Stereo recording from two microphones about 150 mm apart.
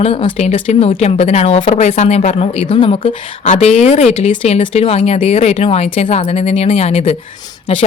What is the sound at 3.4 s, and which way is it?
Speech, 50° left (ahead or behind).